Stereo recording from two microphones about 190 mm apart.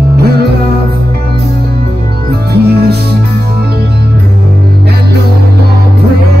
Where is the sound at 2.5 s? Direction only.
60° right (ahead or behind).